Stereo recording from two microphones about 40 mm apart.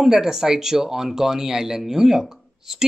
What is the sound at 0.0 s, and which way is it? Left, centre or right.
Speech, centre.